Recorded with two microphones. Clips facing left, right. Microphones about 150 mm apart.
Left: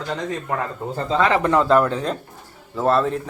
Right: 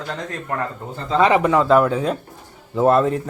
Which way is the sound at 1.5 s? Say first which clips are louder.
Right 1 dB; centre (ahead or behind).